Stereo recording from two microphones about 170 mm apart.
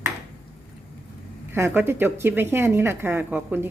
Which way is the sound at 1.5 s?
15° right (ahead or behind).